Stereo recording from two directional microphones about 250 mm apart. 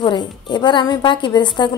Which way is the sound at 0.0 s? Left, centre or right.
Centre.